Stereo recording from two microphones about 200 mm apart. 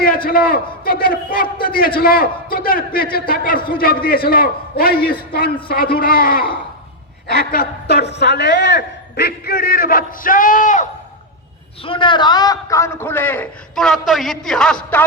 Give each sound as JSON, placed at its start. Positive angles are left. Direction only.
{"t": 0.3, "sound": "a man's voice", "side_deg": 45}
{"t": 11.8, "sound": "a man's voice", "side_deg": 25}